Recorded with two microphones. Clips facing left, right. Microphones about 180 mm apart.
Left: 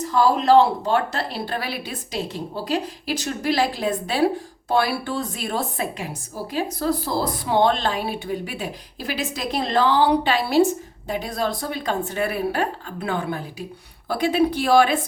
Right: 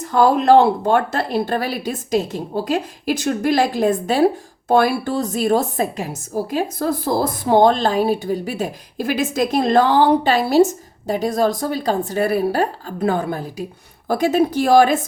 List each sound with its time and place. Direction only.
0.0 s a woman's voice: 55° right (ahead or behind)